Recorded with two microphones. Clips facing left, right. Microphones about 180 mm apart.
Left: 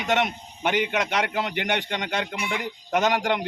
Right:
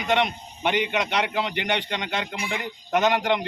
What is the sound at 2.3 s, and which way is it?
Speech, 65° left (ahead or behind).